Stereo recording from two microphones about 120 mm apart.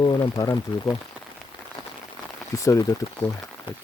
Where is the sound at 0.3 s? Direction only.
30° left (ahead or behind).